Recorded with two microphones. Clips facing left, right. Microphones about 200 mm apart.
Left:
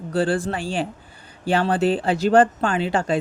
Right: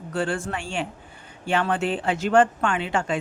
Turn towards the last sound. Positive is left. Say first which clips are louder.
# left 4 dB
turn(degrees=35)  # may be behind; listen again after turning